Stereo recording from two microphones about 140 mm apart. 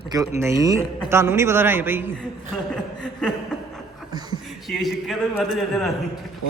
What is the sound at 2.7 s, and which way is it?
Chuckle, 5° left (ahead or behind).